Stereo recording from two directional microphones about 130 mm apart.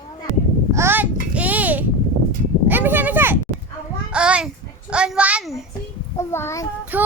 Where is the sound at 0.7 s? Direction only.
20° right (ahead or behind).